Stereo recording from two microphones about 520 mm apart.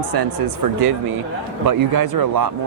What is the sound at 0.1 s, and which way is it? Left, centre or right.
Speech, right.